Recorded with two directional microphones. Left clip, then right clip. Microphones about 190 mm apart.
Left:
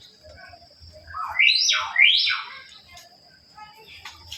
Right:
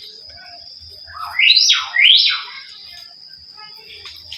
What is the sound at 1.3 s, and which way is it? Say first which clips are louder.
Theremin: right 7 dB; 55° left (ahead or behind).